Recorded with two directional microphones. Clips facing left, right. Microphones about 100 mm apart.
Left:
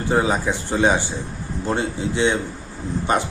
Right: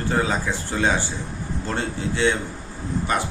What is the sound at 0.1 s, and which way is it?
A man's voice, 20° left (ahead or behind).